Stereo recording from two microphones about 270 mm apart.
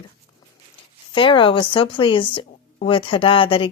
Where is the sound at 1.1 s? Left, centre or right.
Centre.